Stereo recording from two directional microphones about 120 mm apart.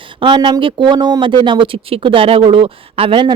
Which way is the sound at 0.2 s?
40° right (ahead or behind).